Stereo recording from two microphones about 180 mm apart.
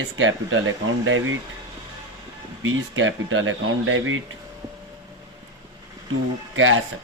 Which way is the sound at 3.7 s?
90° right.